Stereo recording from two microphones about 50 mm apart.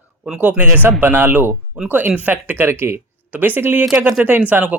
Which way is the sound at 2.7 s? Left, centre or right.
Right.